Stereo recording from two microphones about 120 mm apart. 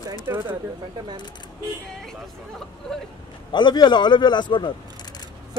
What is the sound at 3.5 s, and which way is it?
A man's voice, 40° left (ahead or behind).